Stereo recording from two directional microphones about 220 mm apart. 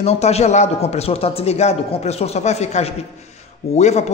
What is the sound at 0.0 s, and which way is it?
Speech, 30° left (ahead or behind).